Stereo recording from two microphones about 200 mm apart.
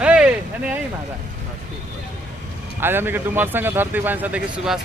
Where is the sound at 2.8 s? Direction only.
10° right (ahead or behind).